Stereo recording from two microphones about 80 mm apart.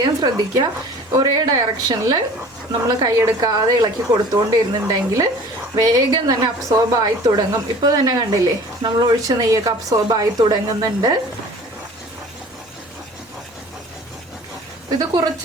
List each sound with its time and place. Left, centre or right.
0.0 s a woman's voice: right
3.4 s a woman's voice: right
14.8 s a woman's voice: right